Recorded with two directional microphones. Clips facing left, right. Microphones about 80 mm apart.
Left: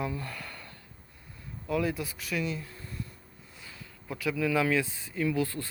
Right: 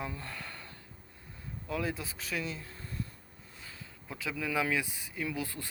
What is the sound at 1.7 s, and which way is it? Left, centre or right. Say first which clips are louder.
Speech: left 5 dB; right.